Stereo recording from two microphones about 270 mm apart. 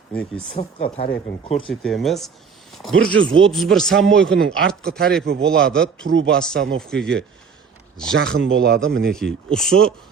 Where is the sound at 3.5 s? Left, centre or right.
Centre.